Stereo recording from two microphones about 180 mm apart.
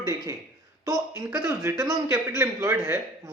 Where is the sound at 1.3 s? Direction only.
10° right (ahead or behind).